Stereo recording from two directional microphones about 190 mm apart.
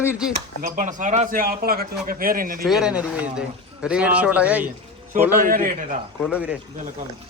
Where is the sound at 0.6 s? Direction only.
45° right (ahead or behind).